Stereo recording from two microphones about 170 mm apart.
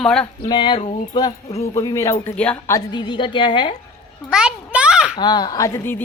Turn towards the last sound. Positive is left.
turn(degrees=15)  # may be behind; listen again after turning